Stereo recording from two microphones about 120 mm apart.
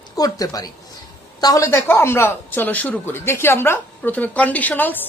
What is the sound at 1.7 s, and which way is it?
A woman's voice, 20° left (ahead or behind).